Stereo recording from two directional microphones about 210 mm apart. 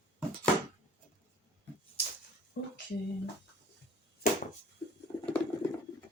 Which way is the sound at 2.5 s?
50° left (ahead or behind).